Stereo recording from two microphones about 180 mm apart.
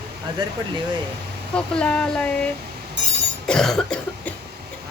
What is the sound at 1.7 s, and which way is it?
Speech, 5° left (ahead or behind).